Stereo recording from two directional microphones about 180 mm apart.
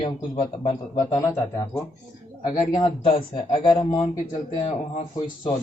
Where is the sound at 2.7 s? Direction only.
25° left (ahead or behind).